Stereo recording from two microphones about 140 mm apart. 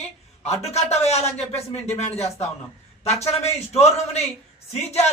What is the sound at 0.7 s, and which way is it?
A man's voice, 50° left (ahead or behind).